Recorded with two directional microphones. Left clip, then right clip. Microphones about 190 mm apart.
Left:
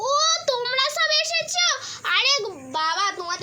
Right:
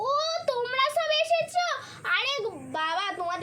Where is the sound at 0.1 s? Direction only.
40° left (ahead or behind).